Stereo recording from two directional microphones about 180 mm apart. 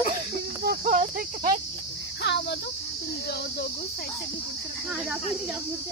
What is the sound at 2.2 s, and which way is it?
Speech, 70° left (ahead or behind).